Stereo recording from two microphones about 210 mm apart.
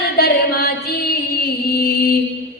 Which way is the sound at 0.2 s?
45° left (ahead or behind).